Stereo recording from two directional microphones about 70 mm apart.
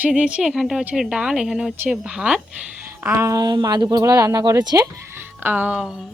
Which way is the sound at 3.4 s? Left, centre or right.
Right.